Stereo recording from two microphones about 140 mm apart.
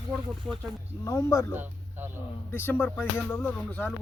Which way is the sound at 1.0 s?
20° left (ahead or behind).